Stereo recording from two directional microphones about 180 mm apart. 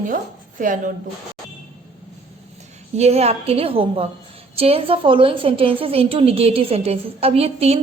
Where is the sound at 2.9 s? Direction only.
35° right (ahead or behind).